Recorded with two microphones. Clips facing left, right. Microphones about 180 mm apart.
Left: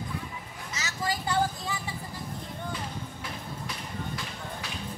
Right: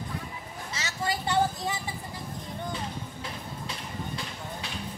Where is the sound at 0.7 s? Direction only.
30° right (ahead or behind).